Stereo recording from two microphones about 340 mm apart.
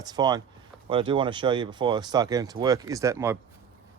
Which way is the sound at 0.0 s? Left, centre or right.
Centre.